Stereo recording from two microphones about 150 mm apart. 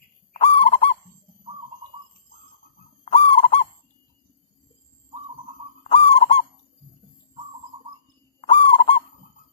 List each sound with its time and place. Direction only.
0.3 s owl: 40° left (ahead or behind)
3.0 s fowl: 40° left (ahead or behind)
5.8 s goose: 40° left (ahead or behind)
8.4 s owl: 40° left (ahead or behind)